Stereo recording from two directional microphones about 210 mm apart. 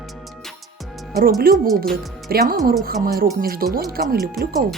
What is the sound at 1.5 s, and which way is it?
Speech, 45° right (ahead or behind).